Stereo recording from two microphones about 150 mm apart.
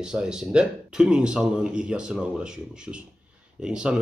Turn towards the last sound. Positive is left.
turn(degrees=-5)  # may be behind; listen again after turning